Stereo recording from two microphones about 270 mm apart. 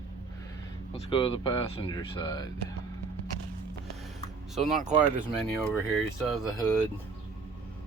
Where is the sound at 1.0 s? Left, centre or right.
Centre.